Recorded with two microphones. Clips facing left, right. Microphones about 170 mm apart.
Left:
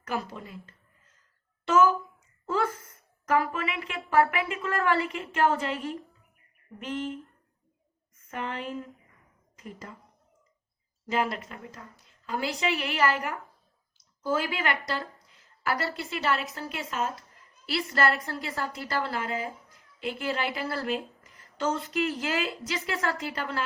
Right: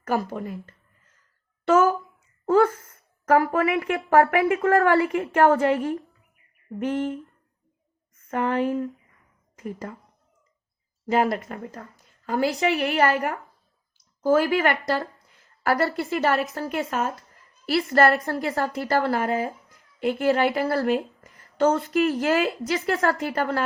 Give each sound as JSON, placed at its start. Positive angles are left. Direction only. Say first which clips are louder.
{"t": 0.0, "sound": "speech", "louder": "right 8 dB", "side_deg": -50}
{"t": 1.6, "sound": "a sound", "louder": "right 3 dB", "side_deg": -65}
{"t": 3.2, "sound": "speech", "louder": "right 7 dB", "side_deg": -55}
{"t": 8.3, "sound": "speech", "louder": "right 11 dB", "side_deg": -60}
{"t": 11.1, "sound": "a woman's voice", "louder": "right 7 dB", "side_deg": -55}